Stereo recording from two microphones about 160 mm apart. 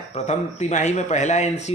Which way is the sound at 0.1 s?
50° left (ahead or behind).